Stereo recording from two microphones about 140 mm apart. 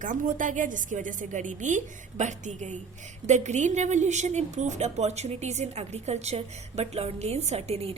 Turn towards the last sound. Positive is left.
turn(degrees=-45)  # may be behind; listen again after turning